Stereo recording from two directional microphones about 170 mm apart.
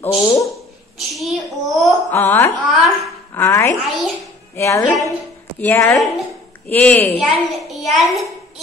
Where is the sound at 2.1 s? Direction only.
15° left (ahead or behind).